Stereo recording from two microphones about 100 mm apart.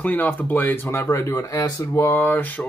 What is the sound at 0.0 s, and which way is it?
Speech, 15° left (ahead or behind).